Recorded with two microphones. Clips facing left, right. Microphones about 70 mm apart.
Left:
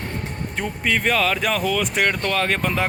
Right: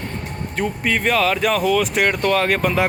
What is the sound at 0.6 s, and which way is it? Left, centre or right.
Speech, centre.